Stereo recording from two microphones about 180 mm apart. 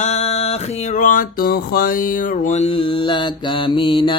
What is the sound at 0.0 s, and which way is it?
Music, 35° left (ahead or behind).